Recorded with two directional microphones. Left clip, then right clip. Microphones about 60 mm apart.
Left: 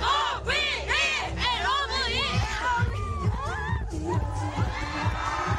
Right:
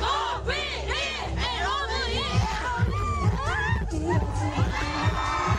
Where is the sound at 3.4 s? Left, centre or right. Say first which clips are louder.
Right 5 dB; right.